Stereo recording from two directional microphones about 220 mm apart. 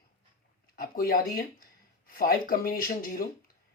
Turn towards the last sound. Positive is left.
turn(degrees=40)  # may be behind; listen again after turning